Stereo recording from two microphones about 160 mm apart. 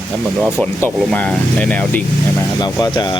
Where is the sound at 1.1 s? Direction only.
5° left (ahead or behind).